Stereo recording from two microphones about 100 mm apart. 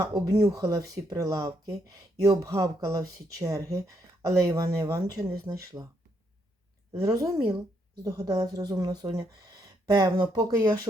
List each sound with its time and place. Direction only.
0.3 s speech: 30° right (ahead or behind)
6.9 s speech: 35° right (ahead or behind)
9.1 s a sound: 40° right (ahead or behind)
10.3 s speech: 45° right (ahead or behind)